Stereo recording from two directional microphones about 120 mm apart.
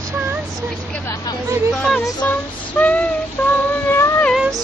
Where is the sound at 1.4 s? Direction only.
25° right (ahead or behind).